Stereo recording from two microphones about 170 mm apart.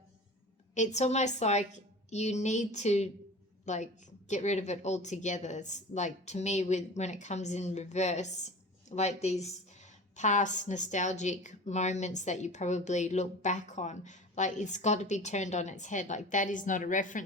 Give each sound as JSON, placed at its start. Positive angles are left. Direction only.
{"t": 0.7, "sound": "a woman's voice", "side_deg": 45}